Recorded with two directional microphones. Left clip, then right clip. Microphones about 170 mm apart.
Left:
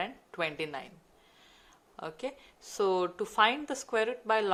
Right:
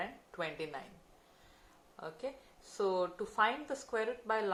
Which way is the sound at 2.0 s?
50° left (ahead or behind).